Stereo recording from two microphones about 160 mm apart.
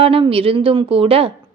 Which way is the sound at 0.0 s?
35° right (ahead or behind).